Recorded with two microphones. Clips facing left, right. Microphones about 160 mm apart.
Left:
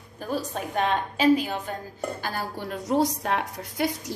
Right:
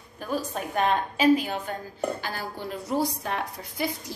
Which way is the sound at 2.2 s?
55° left (ahead or behind).